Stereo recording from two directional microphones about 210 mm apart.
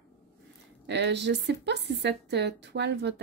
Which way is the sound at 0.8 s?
55° right (ahead or behind).